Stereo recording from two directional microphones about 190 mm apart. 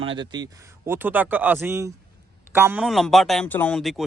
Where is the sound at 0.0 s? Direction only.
25° right (ahead or behind).